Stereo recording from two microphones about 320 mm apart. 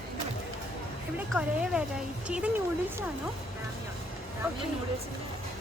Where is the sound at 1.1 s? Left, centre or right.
Centre.